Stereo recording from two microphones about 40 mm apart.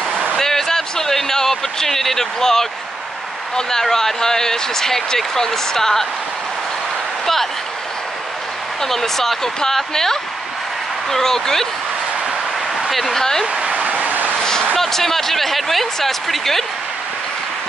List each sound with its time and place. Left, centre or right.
0.4 s a sound: centre
3.5 s speech: centre
8.8 s speech: centre
12.8 s speech: centre
13.5 s vehicle: right
14.4 s a sound: centre
14.8 s speech: centre